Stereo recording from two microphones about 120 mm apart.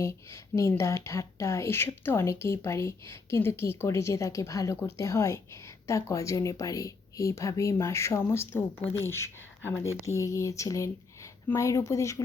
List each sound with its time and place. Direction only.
0.0 s speech: 25° left (ahead or behind)